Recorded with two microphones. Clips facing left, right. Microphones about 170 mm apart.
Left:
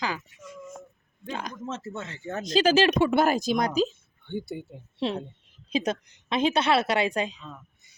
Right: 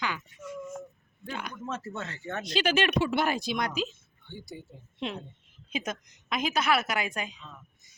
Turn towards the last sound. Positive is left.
turn(degrees=30)  # may be behind; listen again after turning